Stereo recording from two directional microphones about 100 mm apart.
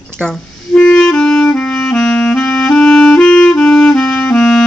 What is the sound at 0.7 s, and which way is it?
Clarinet, 5° left (ahead or behind).